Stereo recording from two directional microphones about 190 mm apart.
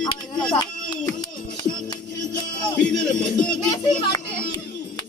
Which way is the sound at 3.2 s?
20° left (ahead or behind).